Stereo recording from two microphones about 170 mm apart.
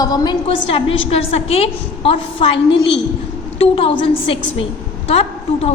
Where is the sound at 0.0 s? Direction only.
20° left (ahead or behind).